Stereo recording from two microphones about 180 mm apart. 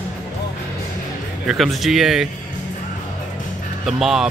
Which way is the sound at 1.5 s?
Centre (ahead or behind).